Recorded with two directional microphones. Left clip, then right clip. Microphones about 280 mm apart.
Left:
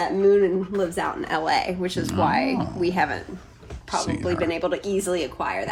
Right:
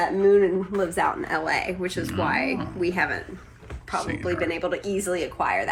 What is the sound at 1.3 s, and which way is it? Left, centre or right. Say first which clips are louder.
Speech: left 2 dB; centre.